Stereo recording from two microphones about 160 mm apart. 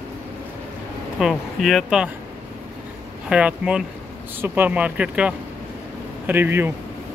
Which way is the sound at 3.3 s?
5° right (ahead or behind).